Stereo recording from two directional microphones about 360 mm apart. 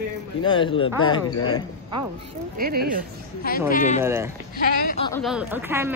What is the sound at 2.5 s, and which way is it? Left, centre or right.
Speech, right.